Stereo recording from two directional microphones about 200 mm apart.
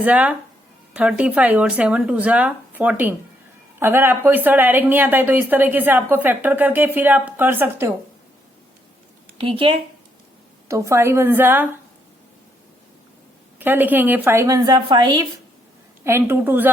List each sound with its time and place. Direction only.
0.0 s a woman's voice: 5° right (ahead or behind)
9.4 s speech: 25° right (ahead or behind)
10.7 s a woman's voice: 15° right (ahead or behind)
13.6 s a woman's voice: 10° right (ahead or behind)
16.0 s a woman's voice: 10° right (ahead or behind)